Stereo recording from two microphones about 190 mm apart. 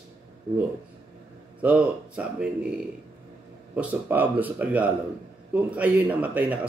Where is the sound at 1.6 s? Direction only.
5° right (ahead or behind).